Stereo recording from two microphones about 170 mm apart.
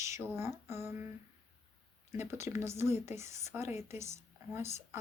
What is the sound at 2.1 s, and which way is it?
Speech, 15° right (ahead or behind).